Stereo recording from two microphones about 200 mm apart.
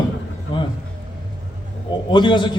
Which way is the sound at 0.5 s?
25° left (ahead or behind).